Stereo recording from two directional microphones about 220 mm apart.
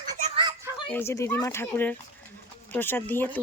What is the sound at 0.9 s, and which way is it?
Speech, 10° left (ahead or behind).